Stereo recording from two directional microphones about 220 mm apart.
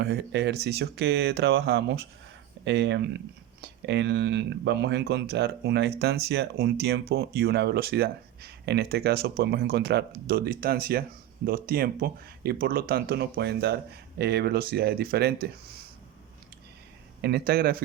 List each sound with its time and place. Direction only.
0.0 s speech: 50° right (ahead or behind)
17.2 s speech: 45° right (ahead or behind)